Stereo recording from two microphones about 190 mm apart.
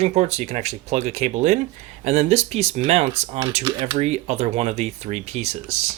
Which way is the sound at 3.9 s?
35° right (ahead or behind).